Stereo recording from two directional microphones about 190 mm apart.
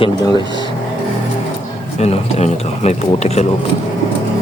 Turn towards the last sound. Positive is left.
turn(degrees=35)  # may be behind; listen again after turning